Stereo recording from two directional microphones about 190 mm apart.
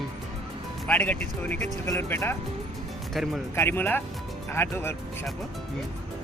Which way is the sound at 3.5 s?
10° left (ahead or behind).